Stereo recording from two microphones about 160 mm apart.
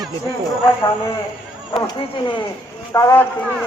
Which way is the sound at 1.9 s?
30° left (ahead or behind).